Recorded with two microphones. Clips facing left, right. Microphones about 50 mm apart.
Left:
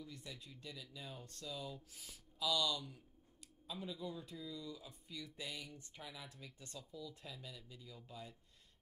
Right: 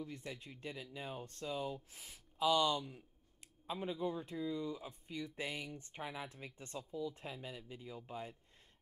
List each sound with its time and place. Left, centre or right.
0.0 s speech: right